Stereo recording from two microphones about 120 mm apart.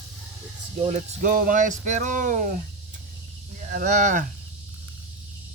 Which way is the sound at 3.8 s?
85° right.